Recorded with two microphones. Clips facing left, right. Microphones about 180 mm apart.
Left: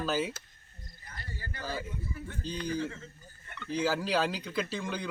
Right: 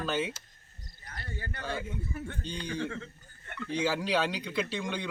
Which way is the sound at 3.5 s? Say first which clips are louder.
Right 1 dB; 75° right (ahead or behind).